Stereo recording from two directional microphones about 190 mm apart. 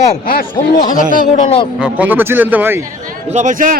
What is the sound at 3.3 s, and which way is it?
Speech, 40° right (ahead or behind).